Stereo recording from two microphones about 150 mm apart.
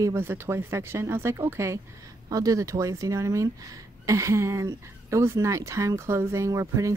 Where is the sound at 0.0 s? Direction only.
15° right (ahead or behind).